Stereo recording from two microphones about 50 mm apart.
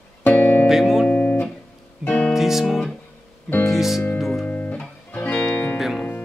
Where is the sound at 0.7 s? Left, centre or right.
Centre.